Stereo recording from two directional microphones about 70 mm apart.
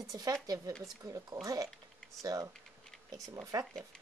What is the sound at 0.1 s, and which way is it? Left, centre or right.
A woman's voice, right.